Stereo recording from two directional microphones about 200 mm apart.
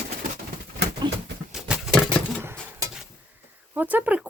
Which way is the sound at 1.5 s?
Centre (ahead or behind).